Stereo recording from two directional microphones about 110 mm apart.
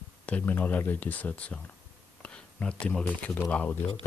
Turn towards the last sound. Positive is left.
turn(degrees=15)  # may be behind; listen again after turning